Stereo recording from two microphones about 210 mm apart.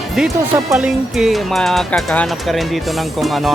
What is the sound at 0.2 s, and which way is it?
Speech, 5° right (ahead or behind).